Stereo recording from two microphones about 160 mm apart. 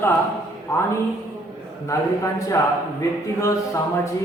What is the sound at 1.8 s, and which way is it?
Speech, 20° left (ahead or behind).